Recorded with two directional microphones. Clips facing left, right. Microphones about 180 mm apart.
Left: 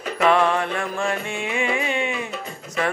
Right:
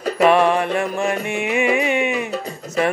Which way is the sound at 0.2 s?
20° right (ahead or behind).